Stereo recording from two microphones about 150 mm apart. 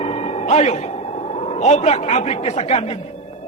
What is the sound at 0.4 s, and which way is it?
A man's voice, 50° left (ahead or behind).